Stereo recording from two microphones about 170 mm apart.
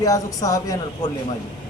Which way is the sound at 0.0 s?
20° left (ahead or behind).